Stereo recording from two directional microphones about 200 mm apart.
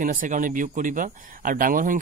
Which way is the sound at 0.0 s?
40° right (ahead or behind).